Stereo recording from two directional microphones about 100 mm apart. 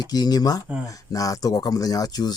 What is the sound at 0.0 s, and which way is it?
Speech, 45° left (ahead or behind).